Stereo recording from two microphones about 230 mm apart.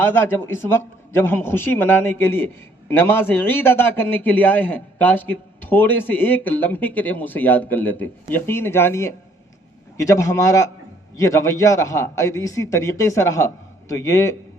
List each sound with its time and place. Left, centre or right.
0.0 s a man's voice: centre